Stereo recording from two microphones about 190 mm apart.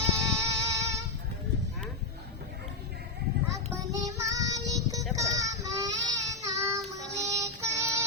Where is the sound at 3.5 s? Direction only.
15° right (ahead or behind).